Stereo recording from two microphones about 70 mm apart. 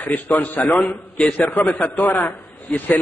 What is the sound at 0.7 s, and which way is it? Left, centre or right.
Speech, centre.